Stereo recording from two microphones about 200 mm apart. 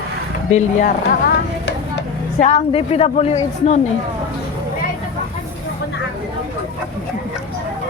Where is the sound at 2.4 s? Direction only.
30° left (ahead or behind).